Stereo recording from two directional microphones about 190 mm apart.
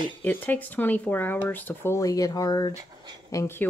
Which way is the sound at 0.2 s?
10° left (ahead or behind).